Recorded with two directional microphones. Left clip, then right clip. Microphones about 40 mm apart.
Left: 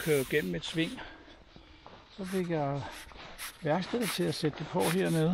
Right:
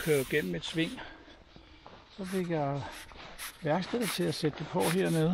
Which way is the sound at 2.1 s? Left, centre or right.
Centre.